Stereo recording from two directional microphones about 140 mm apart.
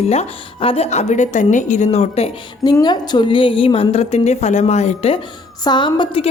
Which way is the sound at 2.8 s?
30° left (ahead or behind).